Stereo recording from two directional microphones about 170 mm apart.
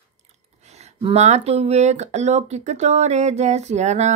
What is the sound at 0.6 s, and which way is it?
Speech, 40° right (ahead or behind).